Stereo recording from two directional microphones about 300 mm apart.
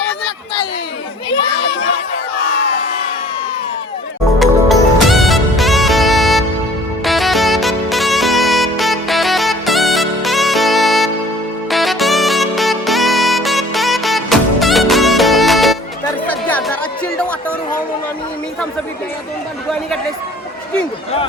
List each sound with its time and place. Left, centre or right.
2.3 s crowd: left
4.4 s music: centre
11.7 s saxophone: centre
16.2 s chatter: centre